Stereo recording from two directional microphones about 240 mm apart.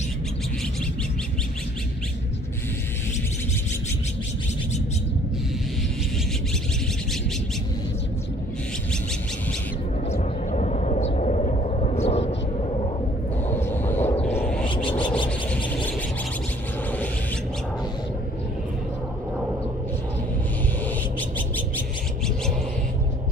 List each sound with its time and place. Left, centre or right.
10.1 s vehicle: left
13.5 s a sound: centre
15.2 s whale vocalization: centre